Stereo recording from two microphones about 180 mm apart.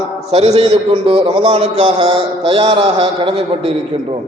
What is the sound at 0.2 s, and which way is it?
A man's voice, 35° right (ahead or behind).